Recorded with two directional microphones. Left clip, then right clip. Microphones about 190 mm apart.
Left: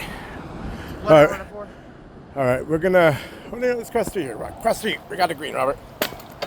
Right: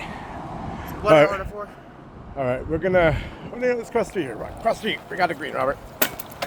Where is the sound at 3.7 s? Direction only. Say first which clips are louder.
Even; 15° left (ahead or behind).